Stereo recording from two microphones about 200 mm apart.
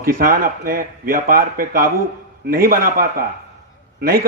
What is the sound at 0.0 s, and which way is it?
Speech, 45° right (ahead or behind).